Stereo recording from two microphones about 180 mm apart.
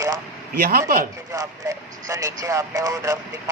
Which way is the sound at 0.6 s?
55° right (ahead or behind).